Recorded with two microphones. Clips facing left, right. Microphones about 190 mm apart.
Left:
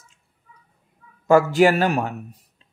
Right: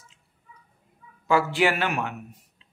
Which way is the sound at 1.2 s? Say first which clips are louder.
Left 7 dB; 45° left (ahead or behind).